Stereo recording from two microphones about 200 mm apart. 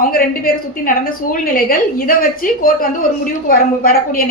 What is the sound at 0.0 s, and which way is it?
A woman's voice, 45° left (ahead or behind).